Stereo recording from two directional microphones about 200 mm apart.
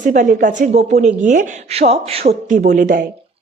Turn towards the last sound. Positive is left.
turn(degrees=-40)  # may be behind; listen again after turning